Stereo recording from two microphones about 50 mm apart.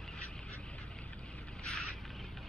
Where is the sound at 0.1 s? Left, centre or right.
Centre.